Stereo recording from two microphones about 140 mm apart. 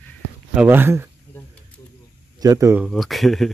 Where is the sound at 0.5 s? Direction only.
15° right (ahead or behind).